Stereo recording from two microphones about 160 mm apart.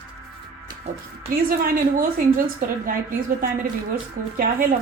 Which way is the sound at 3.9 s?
65° right (ahead or behind).